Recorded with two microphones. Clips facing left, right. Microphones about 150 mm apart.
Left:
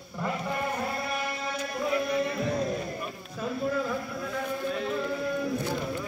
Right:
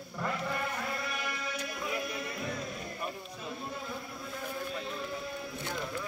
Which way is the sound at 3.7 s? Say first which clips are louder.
Left 10 dB; 90° left.